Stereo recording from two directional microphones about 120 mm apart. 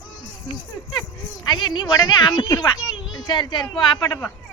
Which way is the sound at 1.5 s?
35° left (ahead or behind).